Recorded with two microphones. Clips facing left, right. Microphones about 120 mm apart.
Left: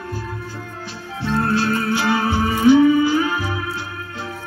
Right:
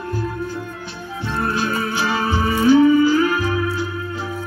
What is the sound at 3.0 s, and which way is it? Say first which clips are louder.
Music: right 3 dB; 20° left (ahead or behind).